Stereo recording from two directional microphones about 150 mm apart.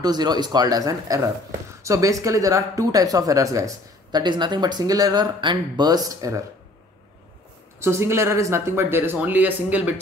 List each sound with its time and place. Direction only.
0.0 s speech: 30° right (ahead or behind)
7.8 s speech: 15° right (ahead or behind)